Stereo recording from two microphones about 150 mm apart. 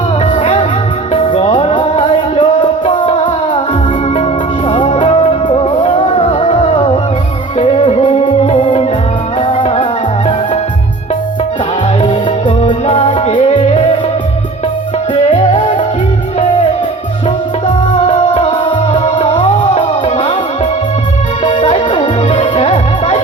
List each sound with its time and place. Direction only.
0.3 s music: 45° left (ahead or behind)
4.7 s music: 35° left (ahead or behind)
12.0 s music: 40° left (ahead or behind)
15.1 s music: 40° left (ahead or behind)
18.0 s music: 45° left (ahead or behind)
21.5 s music: 45° left (ahead or behind)